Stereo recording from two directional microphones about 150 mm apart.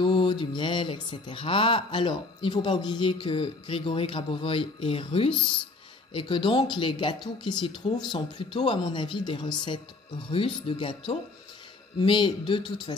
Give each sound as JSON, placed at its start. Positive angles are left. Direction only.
{"t": 0.0, "sound": "speech", "side_deg": 30}